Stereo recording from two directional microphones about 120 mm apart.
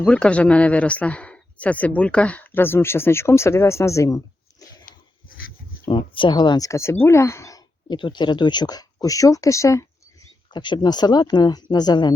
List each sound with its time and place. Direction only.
0.0 s speech: 10° left (ahead or behind); by 4.2 s 25° left (ahead or behind)
5.9 s speech: 40° left (ahead or behind)
6.7 s speech: 20° left (ahead or behind)
7.9 s speech: 40° left (ahead or behind); by 9.8 s 25° left (ahead or behind)
10.5 s speech: 40° left (ahead or behind)